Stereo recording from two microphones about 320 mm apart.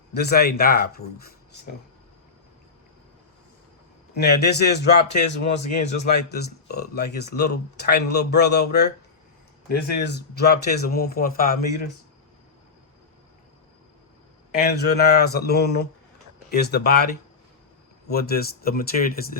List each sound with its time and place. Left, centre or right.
0.1 s speech: left
4.1 s a man's voice: left
14.6 s speech: left
18.1 s speech: left